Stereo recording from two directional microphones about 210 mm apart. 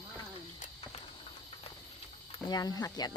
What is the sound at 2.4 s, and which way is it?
Speech, 20° left (ahead or behind).